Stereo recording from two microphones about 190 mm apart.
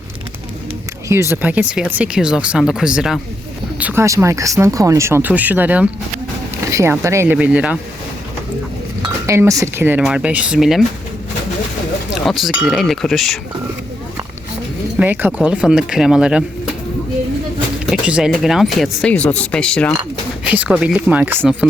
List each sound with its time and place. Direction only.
1.0 s speech: 15° right (ahead or behind)
9.0 s speech: 15° right (ahead or behind)
12.1 s speech: centre (ahead or behind)
14.9 s speech: 10° right (ahead or behind)
17.8 s speech: 5° right (ahead or behind)
20.4 s speech: 5° right (ahead or behind)